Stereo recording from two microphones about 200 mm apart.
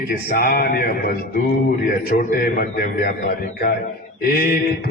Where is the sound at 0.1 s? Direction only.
50° left (ahead or behind).